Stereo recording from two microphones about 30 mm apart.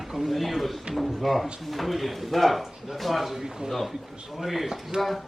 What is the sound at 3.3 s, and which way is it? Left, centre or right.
Speech, centre.